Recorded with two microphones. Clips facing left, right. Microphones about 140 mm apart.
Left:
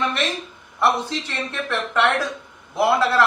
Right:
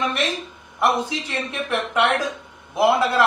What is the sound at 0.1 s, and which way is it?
Speech, 15° right (ahead or behind).